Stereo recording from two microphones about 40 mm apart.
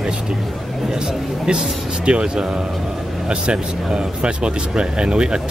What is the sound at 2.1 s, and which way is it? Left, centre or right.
Speech, right.